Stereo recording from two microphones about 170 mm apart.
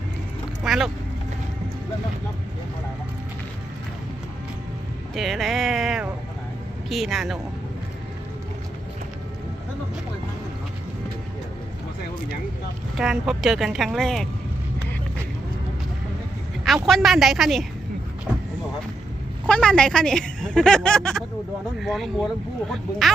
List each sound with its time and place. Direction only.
0.6 s vehicle: centre (ahead or behind)
5.1 s a sound: centre (ahead or behind)
6.8 s speech: centre (ahead or behind)
13.0 s speech: centre (ahead or behind)
16.6 s speech: centre (ahead or behind)
18.3 s a sound: 5° right (ahead or behind)
19.5 s speech: 5° left (ahead or behind)